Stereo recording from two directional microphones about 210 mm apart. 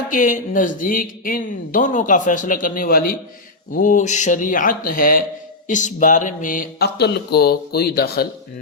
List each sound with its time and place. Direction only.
0.1 s speech: 40° left (ahead or behind)